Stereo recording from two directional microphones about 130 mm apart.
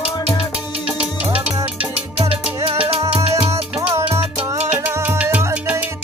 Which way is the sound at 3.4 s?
45° right (ahead or behind).